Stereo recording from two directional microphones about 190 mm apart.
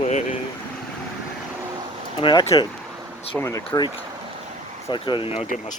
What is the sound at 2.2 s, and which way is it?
Speech, 25° left (ahead or behind).